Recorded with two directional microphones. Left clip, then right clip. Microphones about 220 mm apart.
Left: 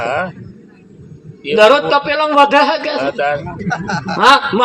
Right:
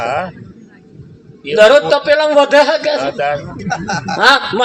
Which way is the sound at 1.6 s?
20° left (ahead or behind).